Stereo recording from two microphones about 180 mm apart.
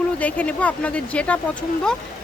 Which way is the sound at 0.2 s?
10° left (ahead or behind).